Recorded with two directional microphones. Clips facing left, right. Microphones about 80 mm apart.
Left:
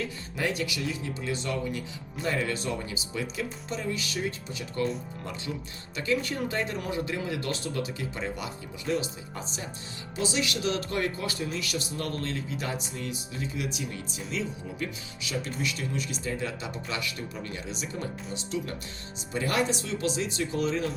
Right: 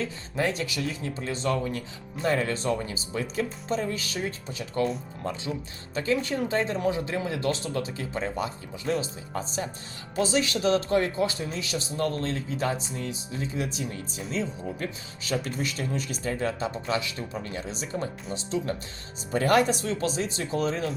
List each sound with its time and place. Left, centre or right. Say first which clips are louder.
0.0 s a man's voice: right 3 dB; right
5.9 s a man's voice: right 2 dB; right
19.3 s a man's voice: right 6 dB; right